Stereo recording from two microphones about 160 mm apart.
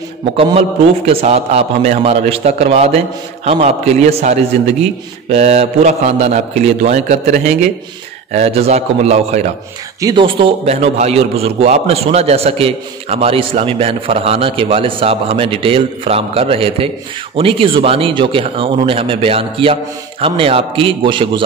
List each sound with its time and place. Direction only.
0.4 s a man's voice: 40° right (ahead or behind)
9.9 s a man's voice: 25° right (ahead or behind)